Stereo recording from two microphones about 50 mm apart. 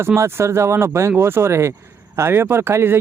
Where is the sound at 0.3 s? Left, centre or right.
Right.